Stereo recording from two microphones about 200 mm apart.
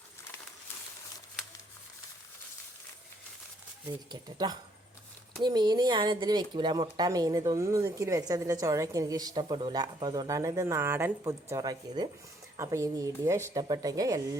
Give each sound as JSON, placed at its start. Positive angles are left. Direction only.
{"t": 4.1, "sound": "a woman's voice", "side_deg": -20}